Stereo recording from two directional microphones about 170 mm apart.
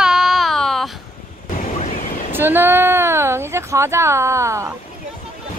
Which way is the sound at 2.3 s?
10° right (ahead or behind).